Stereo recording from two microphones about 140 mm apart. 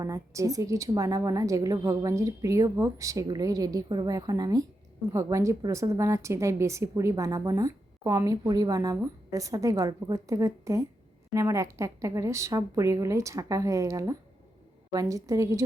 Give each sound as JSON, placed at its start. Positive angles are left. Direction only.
{"t": 0.0, "sound": "a woman's voice", "side_deg": -25}